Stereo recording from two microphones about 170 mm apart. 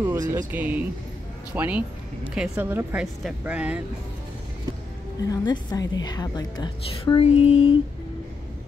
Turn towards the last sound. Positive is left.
turn(degrees=35)  # may be behind; listen again after turning